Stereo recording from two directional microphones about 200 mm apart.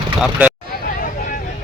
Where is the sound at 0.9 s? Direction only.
45° left (ahead or behind).